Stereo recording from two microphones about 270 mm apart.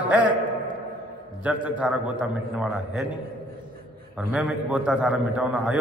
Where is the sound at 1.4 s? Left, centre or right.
Centre.